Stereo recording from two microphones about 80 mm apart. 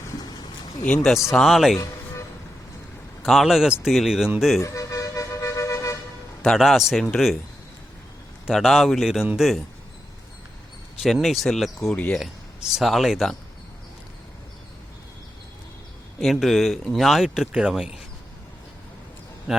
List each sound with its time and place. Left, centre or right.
0.2 s a sound: left
0.9 s speech: centre
1.3 s speech: centre
3.2 s speech: centre
4.6 s music: left
6.4 s speech: centre
8.5 s speech: centre
11.0 s speech: centre
11.9 s speech: centre
12.2 s speech: centre
16.2 s speech: centre
19.5 s a sound: centre